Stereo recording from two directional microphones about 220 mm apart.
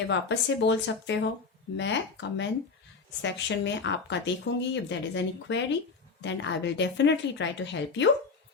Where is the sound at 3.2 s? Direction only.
55° left (ahead or behind).